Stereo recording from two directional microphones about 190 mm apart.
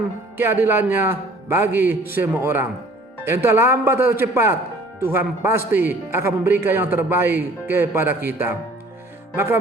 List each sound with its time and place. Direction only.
0.3 s a man's voice: 10° right (ahead or behind)
9.3 s music: 10° right (ahead or behind)